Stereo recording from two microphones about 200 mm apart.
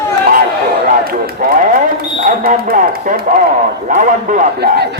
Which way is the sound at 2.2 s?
45° right (ahead or behind).